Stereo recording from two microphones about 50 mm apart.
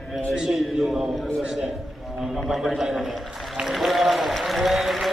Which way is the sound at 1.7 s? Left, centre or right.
Centre.